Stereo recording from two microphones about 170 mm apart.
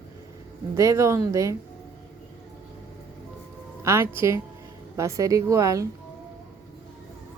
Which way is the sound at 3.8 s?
15° right (ahead or behind).